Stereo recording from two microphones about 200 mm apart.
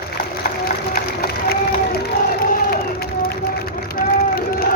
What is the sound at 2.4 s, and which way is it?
Run, 50° left (ahead or behind).